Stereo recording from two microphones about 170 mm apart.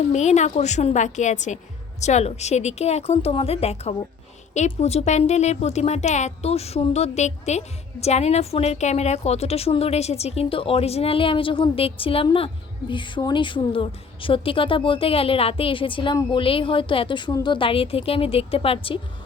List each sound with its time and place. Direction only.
0.1 s a woman's voice: 40° left (ahead or behind)